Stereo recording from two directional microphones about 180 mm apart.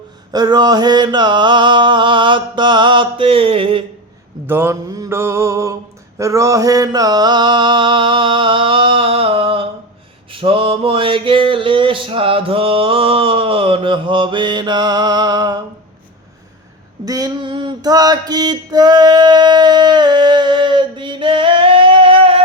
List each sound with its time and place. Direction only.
0.3 s mantra: 20° right (ahead or behind)
4.4 s mantra: 15° right (ahead or behind)
17.1 s mantra: 20° right (ahead or behind)